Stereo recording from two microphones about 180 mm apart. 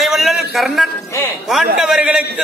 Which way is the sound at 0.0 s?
Centre (ahead or behind).